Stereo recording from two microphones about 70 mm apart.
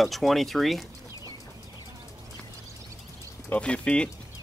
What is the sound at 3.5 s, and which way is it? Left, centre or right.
Speech, centre.